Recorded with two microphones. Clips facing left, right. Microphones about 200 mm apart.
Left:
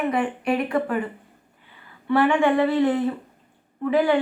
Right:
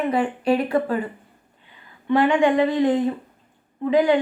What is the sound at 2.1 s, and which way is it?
A woman's voice, 15° right (ahead or behind).